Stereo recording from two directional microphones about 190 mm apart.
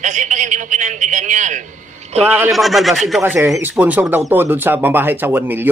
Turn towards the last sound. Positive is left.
turn(degrees=-10)  # may be behind; listen again after turning